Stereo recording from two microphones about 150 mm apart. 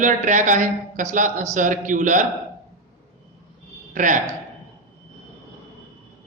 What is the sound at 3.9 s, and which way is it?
Speech, 60° right (ahead or behind).